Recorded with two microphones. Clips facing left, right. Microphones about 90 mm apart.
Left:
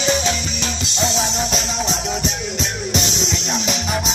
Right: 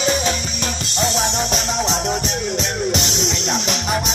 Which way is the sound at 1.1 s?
60° right (ahead or behind).